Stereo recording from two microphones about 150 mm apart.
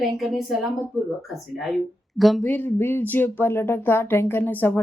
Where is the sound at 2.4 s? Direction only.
10° left (ahead or behind).